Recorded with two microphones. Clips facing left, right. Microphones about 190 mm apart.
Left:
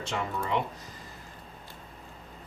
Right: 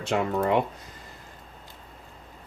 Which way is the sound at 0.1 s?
60° right (ahead or behind).